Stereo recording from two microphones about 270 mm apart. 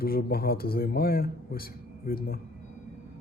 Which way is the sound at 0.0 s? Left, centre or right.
Left.